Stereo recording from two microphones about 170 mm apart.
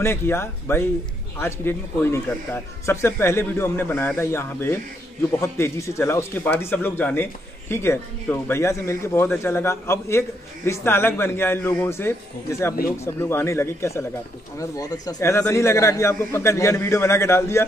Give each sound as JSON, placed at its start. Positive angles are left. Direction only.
{"t": 0.0, "sound": "speech", "side_deg": 15}